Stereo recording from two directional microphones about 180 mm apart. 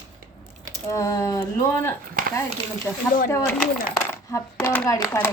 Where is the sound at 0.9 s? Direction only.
15° left (ahead or behind).